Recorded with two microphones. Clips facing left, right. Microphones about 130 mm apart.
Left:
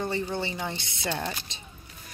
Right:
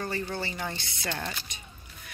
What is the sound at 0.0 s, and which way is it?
A woman's voice, 20° left (ahead or behind).